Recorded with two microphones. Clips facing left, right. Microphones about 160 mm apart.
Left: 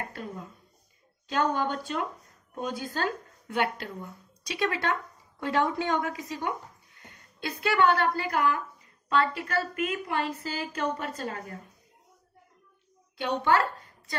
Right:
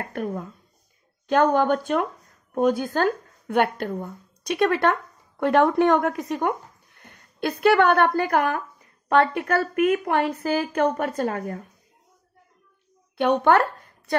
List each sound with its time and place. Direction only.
0.1 s a sound: 60° right (ahead or behind)
1.3 s a woman's voice: 60° right (ahead or behind)
13.2 s speech: 60° right (ahead or behind)